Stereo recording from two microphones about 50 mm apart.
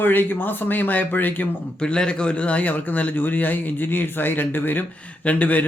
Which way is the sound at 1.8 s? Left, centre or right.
Centre.